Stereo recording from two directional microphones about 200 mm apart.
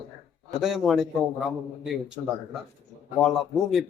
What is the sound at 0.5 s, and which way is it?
Speech, centre (ahead or behind).